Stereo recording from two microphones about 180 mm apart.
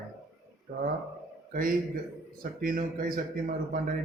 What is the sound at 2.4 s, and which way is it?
Speech, 50° right (ahead or behind).